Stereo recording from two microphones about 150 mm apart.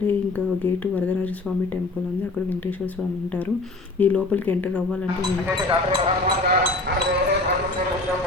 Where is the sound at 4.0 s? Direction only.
10° left (ahead or behind).